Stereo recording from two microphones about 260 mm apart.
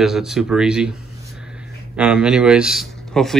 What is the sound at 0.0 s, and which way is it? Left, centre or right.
Speech, centre.